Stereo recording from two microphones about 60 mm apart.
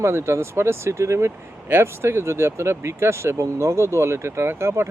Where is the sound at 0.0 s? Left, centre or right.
Right.